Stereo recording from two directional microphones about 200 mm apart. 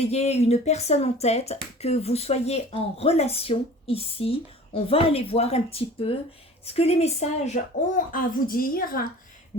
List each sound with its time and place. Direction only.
0.0 s speech: 30° left (ahead or behind)